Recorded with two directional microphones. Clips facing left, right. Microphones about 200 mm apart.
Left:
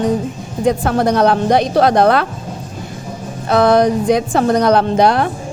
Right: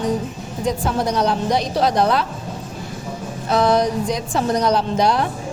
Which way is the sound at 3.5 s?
60° left (ahead or behind).